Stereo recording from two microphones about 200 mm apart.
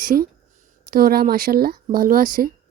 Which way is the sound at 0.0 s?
45° right (ahead or behind).